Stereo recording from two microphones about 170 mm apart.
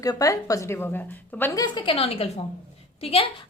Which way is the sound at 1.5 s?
25° left (ahead or behind).